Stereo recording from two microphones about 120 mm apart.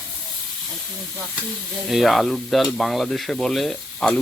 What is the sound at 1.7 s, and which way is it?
Stir, 5° right (ahead or behind).